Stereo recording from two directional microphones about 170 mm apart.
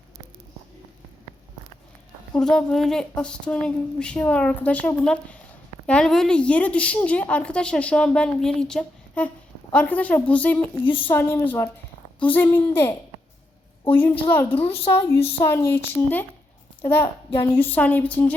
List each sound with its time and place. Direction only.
2.3 s a woman's voice: 5° left (ahead or behind)
10.8 s speech: 30° left (ahead or behind)
11.1 s a woman's voice: 15° left (ahead or behind)